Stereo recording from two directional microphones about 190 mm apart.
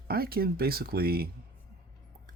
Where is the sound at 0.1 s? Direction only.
55° right (ahead or behind).